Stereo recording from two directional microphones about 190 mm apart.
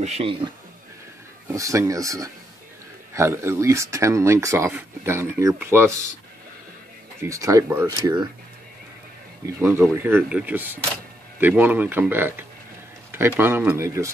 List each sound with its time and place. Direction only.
0.0 s a man's voice: 35° right (ahead or behind)
1.5 s speech: 15° right (ahead or behind)
7.2 s speech: 15° right (ahead or behind)
9.6 s speech: 10° right (ahead or behind)